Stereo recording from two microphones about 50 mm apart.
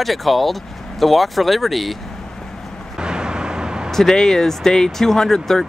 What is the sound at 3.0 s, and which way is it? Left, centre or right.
Vehicle, centre.